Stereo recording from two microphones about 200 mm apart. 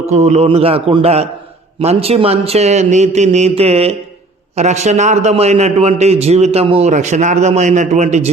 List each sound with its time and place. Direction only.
0.0 s a man's voice: 35° right (ahead or behind)